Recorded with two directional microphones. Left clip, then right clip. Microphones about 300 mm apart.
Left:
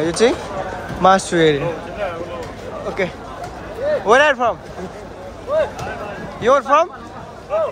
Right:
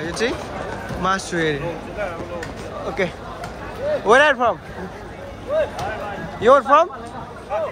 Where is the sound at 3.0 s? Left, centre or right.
Centre.